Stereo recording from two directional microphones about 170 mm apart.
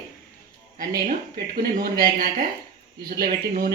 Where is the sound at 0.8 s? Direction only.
60° right (ahead or behind).